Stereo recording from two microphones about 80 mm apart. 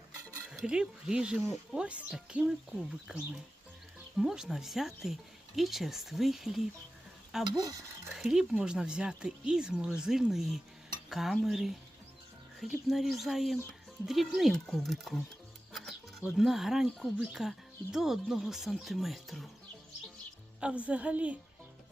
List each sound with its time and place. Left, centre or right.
0.5 s speech: centre
16.4 s speech: centre
20.6 s speech: centre